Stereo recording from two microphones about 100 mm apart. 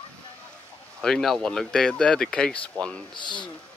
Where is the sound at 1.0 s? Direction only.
5° left (ahead or behind).